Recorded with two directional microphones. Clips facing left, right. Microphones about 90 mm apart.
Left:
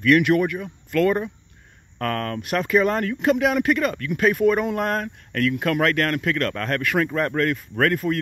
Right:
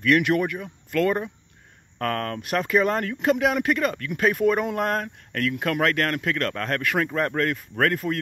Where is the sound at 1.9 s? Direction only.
20° right (ahead or behind).